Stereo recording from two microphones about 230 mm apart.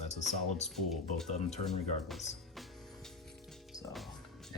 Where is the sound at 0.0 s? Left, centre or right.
Left.